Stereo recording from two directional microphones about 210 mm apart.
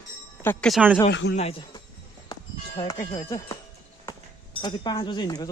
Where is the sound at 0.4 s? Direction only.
5° left (ahead or behind).